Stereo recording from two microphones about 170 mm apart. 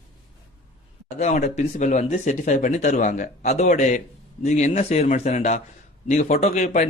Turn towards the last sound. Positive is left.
turn(degrees=45)  # may be behind; listen again after turning